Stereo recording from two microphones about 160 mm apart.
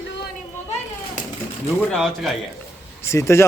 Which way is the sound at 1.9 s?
Centre (ahead or behind).